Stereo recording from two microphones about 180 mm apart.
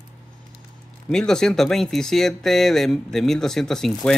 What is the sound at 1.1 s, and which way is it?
Speech, 5° left (ahead or behind).